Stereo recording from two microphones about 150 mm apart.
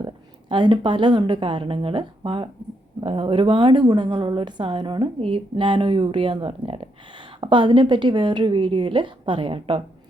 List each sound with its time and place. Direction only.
0.0 s a woman's voice: 30° right (ahead or behind)